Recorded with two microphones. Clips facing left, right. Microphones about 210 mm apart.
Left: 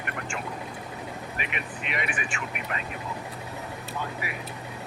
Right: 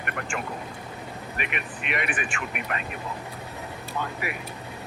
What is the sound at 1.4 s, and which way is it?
Speech, 60° right (ahead or behind).